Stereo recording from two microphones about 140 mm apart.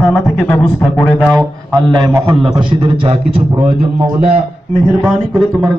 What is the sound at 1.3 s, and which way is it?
A man's voice, 30° right (ahead or behind).